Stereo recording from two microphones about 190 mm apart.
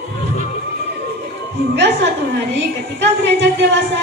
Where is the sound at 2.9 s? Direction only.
70° right (ahead or behind).